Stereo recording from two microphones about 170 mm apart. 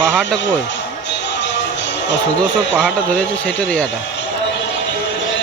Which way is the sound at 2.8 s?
5° left (ahead or behind).